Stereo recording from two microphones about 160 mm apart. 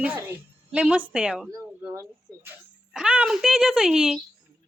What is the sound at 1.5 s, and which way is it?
A woman's voice, 20° right (ahead or behind).